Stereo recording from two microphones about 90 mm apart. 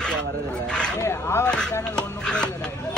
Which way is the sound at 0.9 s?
30° left (ahead or behind).